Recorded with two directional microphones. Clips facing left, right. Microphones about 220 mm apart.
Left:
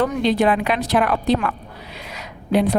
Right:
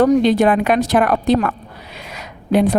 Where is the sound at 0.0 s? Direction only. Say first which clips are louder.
Right 5 dB; 45° right (ahead or behind).